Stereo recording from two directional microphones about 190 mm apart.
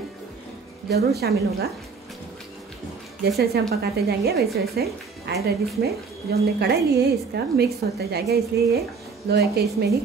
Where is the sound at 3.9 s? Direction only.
55° right (ahead or behind).